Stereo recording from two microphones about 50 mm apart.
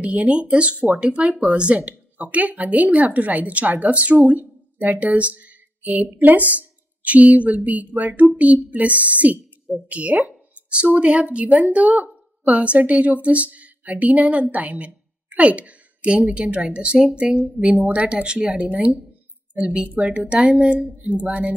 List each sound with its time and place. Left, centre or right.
0.0 s a woman's voice: right
20.0 s speech: right